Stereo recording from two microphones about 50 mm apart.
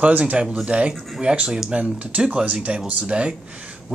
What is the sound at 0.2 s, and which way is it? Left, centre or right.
Speech, right.